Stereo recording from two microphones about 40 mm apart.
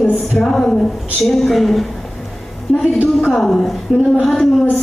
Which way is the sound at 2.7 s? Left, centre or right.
Left.